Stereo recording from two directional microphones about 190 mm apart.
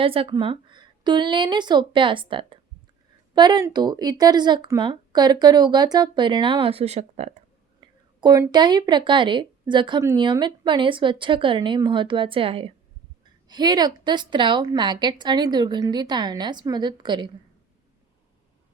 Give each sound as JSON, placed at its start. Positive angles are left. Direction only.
{"t": 0.0, "sound": "speech", "side_deg": -30}
{"t": 8.2, "sound": "speech", "side_deg": -20}